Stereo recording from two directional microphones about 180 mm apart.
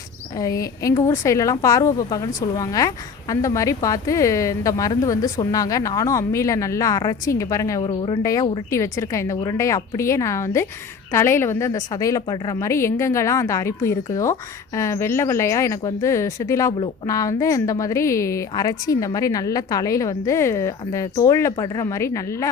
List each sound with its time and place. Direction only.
0.3 s a woman's voice: 20° left (ahead or behind)